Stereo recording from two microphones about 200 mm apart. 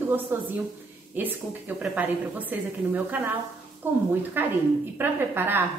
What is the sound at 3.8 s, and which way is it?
A woman's voice, 10° right (ahead or behind).